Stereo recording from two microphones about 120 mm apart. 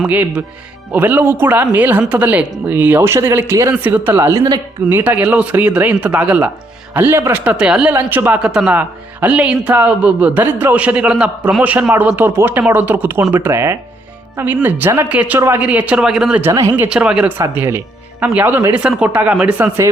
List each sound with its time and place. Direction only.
0.0 s a man's voice: 10° right (ahead or behind)
8.4 s a man's voice: 5° right (ahead or behind); by 15.6 s 20° right (ahead or behind)
15.6 s a man's voice: 10° right (ahead or behind)
16.4 s a man's voice: 25° right (ahead or behind)